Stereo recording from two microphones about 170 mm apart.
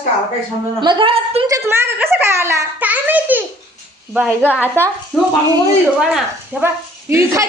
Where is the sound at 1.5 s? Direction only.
15° right (ahead or behind).